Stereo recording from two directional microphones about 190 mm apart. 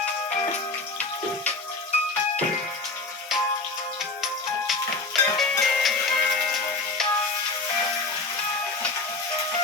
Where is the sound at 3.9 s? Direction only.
Centre (ahead or behind).